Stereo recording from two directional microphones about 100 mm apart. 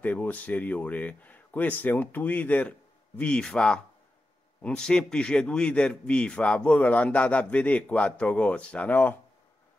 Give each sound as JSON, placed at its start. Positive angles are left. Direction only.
{"t": 0.0, "sound": "a man's voice", "side_deg": 15}